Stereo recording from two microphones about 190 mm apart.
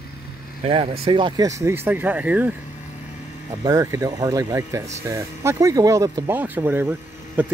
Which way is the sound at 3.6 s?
15° right (ahead or behind).